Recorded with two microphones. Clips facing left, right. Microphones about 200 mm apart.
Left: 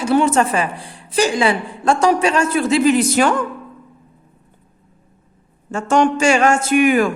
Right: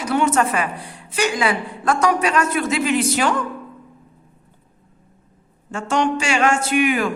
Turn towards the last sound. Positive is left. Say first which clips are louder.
# left 5 dB
turn(degrees=45)  # may be behind; listen again after turning